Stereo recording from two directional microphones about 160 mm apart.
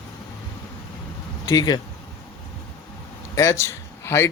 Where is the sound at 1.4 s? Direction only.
25° left (ahead or behind).